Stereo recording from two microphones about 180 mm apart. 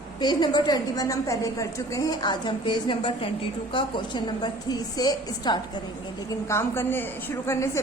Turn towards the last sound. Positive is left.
turn(degrees=15)  # may be behind; listen again after turning